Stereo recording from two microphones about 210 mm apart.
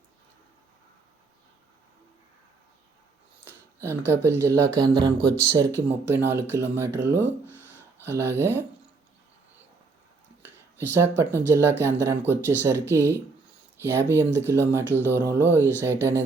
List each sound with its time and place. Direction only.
3.4 s speech: 10° right (ahead or behind)
7.5 s a sound: 10° right (ahead or behind)
8.1 s speech: 55° right (ahead or behind)
8.4 s speech: 10° right (ahead or behind)
10.4 s a sound: 10° right (ahead or behind)
11.4 s speech: 10° right (ahead or behind)
14.3 s speech: 10° right (ahead or behind)
14.8 s music: 10° left (ahead or behind)
15.1 s speech: 10° right (ahead or behind)